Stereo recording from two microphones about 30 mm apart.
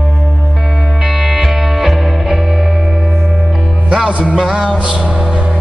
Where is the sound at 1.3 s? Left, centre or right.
Centre.